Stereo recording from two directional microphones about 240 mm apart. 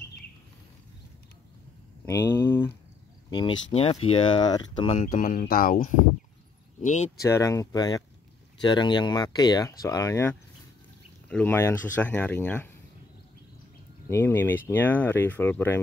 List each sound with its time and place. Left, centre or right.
2.0 s speech: centre; by 7.1 s left
7.2 s speech: centre
14.0 s speech: centre